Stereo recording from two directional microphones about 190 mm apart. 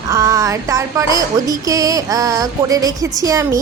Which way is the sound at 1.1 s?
20° right (ahead or behind).